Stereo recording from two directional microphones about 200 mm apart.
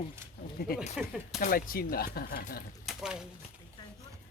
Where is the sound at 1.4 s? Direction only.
45° left (ahead or behind).